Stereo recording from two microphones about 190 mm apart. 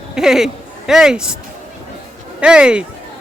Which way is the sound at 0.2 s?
Centre (ahead or behind).